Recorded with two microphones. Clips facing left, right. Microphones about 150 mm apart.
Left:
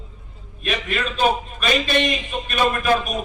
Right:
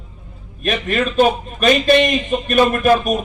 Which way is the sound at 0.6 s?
45° right (ahead or behind).